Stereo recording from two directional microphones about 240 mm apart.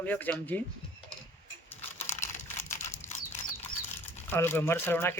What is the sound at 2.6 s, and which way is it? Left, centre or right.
Crumpling, centre.